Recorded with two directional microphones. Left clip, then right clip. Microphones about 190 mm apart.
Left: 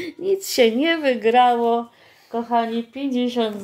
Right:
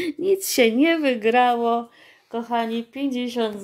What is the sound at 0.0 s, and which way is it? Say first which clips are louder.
Speech: right 1 dB; 35° right (ahead or behind).